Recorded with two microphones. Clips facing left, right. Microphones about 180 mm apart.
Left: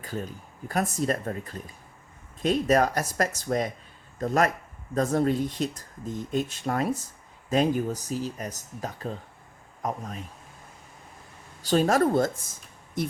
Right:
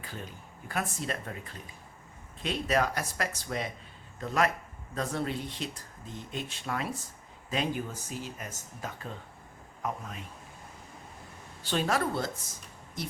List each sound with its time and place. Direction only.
0.0 s speech: 40° left (ahead or behind)
11.6 s speech: 40° left (ahead or behind)